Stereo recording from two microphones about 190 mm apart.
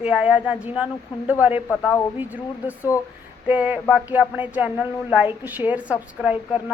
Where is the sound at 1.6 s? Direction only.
10° left (ahead or behind).